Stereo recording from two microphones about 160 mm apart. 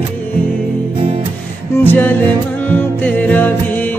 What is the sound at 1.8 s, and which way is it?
Music, 10° left (ahead or behind).